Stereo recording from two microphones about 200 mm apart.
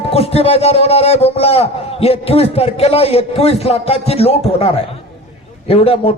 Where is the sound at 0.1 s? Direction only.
30° left (ahead or behind).